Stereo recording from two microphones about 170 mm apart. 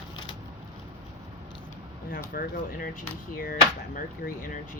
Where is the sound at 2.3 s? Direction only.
55° left (ahead or behind).